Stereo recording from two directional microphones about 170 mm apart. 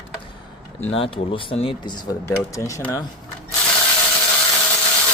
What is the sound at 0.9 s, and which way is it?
Speech, 35° left (ahead or behind).